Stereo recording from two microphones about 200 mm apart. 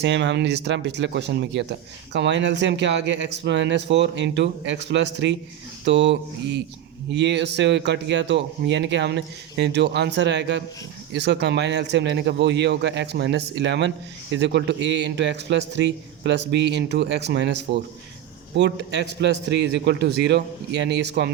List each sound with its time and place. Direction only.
0.0 s a man's voice: 65° right (ahead or behind)